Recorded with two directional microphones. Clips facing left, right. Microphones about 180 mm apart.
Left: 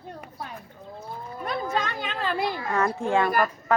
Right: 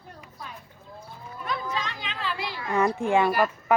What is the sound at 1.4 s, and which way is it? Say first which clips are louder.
Chatter: left 3 dB; 50° left (ahead or behind).